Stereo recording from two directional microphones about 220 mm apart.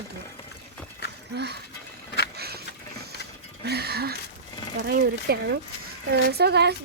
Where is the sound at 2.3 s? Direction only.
45° right (ahead or behind).